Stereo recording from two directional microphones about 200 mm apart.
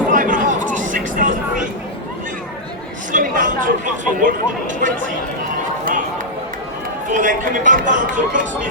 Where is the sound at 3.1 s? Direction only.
40° right (ahead or behind).